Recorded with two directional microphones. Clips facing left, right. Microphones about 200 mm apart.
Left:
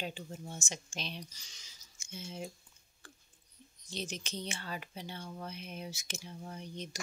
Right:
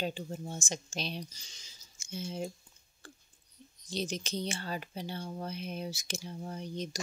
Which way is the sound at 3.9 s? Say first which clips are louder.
Right 6 dB; 35° right (ahead or behind).